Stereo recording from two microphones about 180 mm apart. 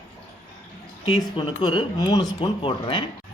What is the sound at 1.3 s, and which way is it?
Speech, 30° left (ahead or behind).